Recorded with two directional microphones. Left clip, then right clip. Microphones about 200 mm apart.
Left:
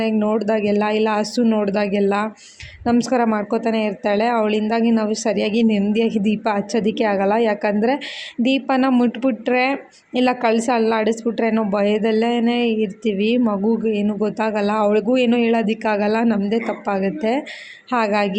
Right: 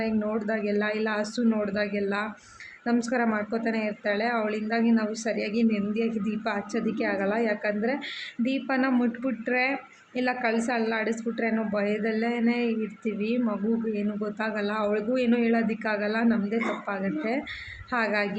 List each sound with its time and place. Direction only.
0.0 s a woman's voice: 30° left (ahead or behind)